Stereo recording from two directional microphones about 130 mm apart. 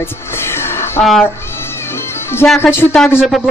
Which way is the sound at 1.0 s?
Centre (ahead or behind).